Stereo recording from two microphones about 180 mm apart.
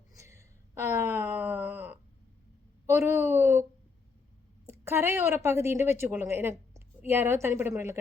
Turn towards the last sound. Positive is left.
turn(degrees=-15)  # may be behind; listen again after turning